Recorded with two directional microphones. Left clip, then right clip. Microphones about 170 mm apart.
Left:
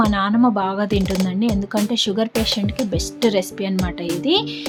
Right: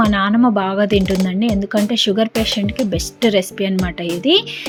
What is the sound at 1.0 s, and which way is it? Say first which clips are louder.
Speech: right 4 dB; centre (ahead or behind).